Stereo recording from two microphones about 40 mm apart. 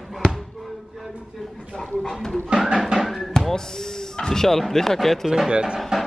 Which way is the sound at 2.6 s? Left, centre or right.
Centre.